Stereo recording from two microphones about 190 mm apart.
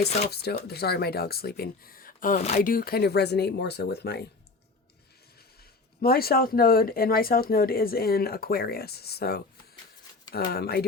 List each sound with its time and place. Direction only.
0.3 s speech: 60° left (ahead or behind); by 2.6 s 35° left (ahead or behind)
2.6 s speech: 50° left (ahead or behind)
6.0 s speech: 55° left (ahead or behind)